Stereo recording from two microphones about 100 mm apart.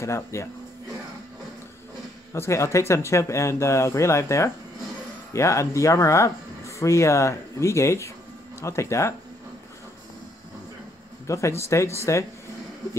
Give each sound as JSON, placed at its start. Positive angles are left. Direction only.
{"t": 0.0, "sound": "speech", "side_deg": 30}
{"t": 2.3, "sound": "speech", "side_deg": 30}
{"t": 11.2, "sound": "speech", "side_deg": 30}